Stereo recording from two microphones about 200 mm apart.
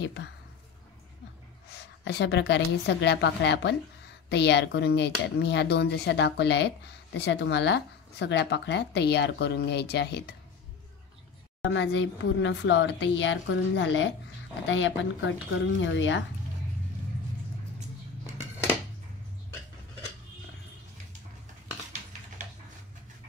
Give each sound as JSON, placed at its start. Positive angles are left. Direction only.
{"t": 0.0, "sound": "speech", "side_deg": 60}
{"t": 1.7, "sound": "a woman's voice", "side_deg": 60}
{"t": 11.6, "sound": "speech", "side_deg": 65}